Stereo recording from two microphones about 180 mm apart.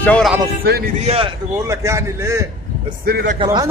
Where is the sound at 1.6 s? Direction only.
15° right (ahead or behind).